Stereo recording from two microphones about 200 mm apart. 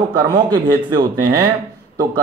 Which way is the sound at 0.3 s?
20° right (ahead or behind).